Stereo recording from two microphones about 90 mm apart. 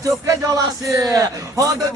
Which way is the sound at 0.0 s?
40° right (ahead or behind).